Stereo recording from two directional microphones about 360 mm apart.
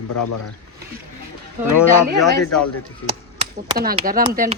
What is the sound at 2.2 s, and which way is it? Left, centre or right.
Speech, centre.